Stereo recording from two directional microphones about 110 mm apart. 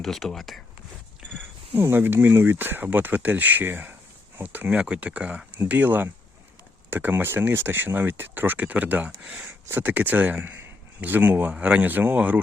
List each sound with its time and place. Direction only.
0.0 s speech: 5° left (ahead or behind)
1.7 s speech: 20° right (ahead or behind)